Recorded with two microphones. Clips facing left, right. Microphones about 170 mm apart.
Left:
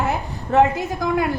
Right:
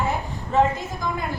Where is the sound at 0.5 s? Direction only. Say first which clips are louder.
Left 4 dB; 70° left (ahead or behind).